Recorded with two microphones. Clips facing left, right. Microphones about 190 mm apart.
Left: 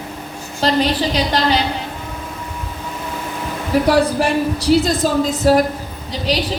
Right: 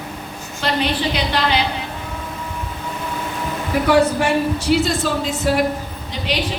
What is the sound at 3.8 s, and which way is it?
A woman's voice, 35° left (ahead or behind).